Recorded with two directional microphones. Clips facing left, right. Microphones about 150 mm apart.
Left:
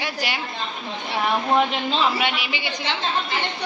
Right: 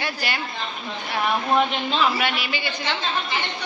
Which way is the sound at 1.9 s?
25° left (ahead or behind).